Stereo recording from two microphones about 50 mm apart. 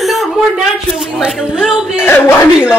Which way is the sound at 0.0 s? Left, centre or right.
Centre.